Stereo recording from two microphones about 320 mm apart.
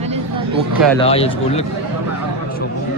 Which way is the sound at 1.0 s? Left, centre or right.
Centre.